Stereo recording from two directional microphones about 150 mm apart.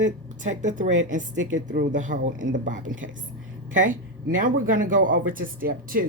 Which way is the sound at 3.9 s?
65° right (ahead or behind).